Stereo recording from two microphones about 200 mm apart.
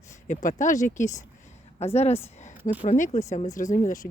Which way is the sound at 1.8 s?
30° left (ahead or behind).